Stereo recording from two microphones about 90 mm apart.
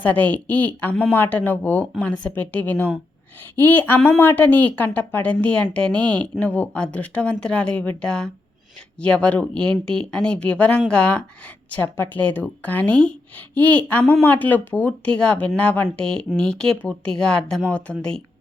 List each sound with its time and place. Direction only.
0.0 s a woman's voice: 15° left (ahead or behind)